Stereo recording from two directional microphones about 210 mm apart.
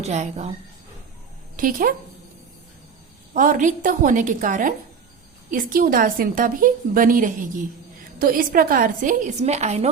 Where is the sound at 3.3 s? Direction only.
40° right (ahead or behind).